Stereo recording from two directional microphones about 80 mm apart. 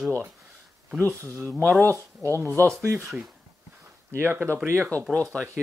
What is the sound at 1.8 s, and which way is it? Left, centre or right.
Speech, right.